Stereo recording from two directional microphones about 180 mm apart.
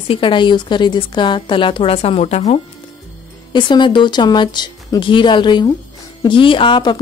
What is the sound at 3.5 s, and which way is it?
A woman's voice, 25° left (ahead or behind).